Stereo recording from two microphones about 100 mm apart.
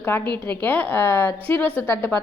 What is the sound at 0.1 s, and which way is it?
A woman's voice, 25° left (ahead or behind).